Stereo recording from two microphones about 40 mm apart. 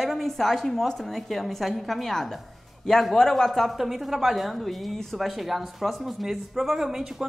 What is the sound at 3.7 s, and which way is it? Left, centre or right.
Speech, centre.